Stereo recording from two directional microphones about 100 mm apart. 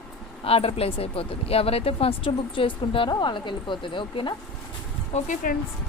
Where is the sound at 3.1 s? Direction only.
50° left (ahead or behind).